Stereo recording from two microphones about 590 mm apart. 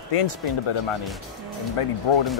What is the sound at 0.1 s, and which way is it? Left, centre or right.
Speech, left.